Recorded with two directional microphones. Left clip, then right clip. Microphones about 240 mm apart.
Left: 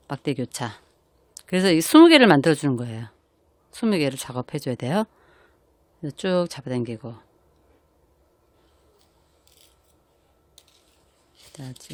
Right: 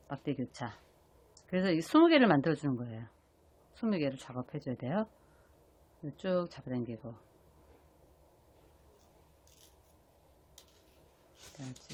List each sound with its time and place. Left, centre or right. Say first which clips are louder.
0.1 s speech: left 10 dB; left
6.1 s speech: left 10 dB; left